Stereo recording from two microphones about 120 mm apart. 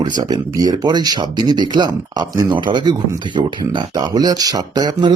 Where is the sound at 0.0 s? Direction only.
35° right (ahead or behind).